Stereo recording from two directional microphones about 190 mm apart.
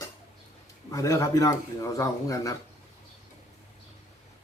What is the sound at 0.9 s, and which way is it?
Speech, 15° left (ahead or behind).